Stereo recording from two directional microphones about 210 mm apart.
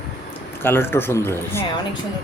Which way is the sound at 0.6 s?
10° left (ahead or behind).